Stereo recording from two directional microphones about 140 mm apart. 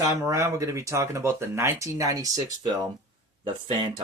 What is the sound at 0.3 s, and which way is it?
Speech, 20° right (ahead or behind).